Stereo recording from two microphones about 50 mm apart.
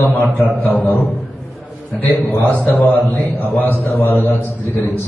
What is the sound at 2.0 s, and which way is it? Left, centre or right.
A man's voice, left.